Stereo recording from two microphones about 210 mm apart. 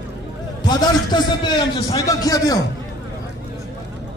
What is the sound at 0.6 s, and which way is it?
A man's voice, 20° left (ahead or behind).